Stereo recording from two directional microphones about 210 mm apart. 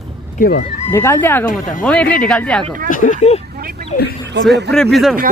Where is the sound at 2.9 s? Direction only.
40° left (ahead or behind).